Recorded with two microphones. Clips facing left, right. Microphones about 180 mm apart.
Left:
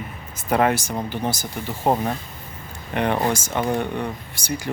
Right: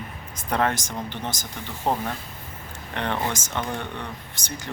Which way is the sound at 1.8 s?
25° left (ahead or behind).